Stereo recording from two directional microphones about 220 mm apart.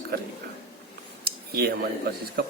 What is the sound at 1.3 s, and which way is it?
Cutlery, 45° right (ahead or behind).